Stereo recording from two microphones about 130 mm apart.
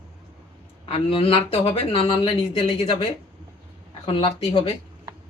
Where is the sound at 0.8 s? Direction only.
45° left (ahead or behind).